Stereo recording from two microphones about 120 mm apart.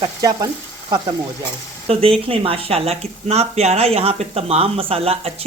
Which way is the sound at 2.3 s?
55° right (ahead or behind).